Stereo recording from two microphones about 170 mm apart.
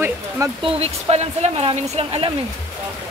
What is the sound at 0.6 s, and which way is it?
Speech, 35° right (ahead or behind).